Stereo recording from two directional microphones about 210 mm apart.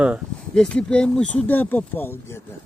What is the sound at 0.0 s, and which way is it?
Speech, centre (ahead or behind).